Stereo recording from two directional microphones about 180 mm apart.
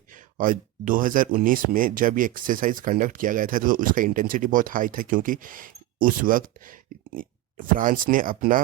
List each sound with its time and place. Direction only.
0.3 s speech: 50° right (ahead or behind)
7.8 s speech: 50° right (ahead or behind)